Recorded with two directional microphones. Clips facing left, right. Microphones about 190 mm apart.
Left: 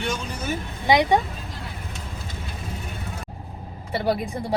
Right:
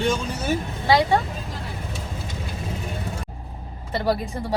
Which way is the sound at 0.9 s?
20° left (ahead or behind).